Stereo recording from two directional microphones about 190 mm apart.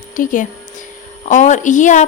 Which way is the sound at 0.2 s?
45° left (ahead or behind).